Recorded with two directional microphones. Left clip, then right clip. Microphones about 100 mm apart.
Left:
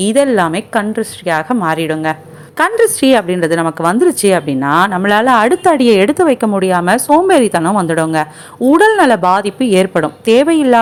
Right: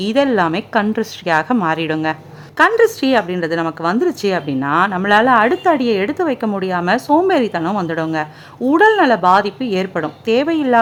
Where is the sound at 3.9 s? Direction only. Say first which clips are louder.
Left 8 dB; 25° left (ahead or behind).